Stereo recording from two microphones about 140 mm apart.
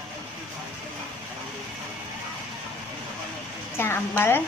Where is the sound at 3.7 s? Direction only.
15° left (ahead or behind).